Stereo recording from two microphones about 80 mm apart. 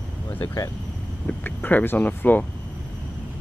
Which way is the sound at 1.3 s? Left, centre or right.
Left.